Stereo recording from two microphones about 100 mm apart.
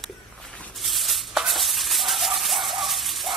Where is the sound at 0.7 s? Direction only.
Centre (ahead or behind).